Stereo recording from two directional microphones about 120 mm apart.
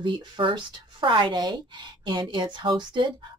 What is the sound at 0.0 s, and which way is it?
A woman's voice, 45° right (ahead or behind).